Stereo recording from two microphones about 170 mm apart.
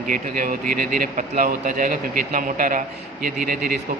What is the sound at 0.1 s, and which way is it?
A man's voice, 55° right (ahead or behind).